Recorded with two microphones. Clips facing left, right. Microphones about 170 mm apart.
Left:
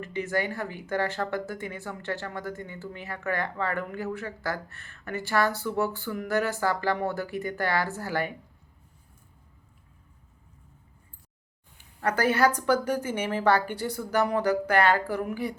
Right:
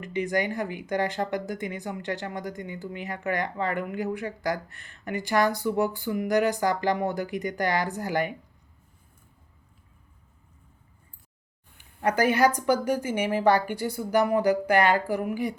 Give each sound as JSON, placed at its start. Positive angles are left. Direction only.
{"t": 0.0, "sound": "speech", "side_deg": -15}
{"t": 11.9, "sound": "speech", "side_deg": -15}